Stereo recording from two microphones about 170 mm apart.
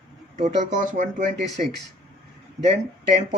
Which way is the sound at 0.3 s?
45° right (ahead or behind).